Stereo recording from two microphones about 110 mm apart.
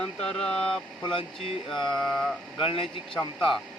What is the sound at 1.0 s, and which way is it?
Speech, 55° left (ahead or behind).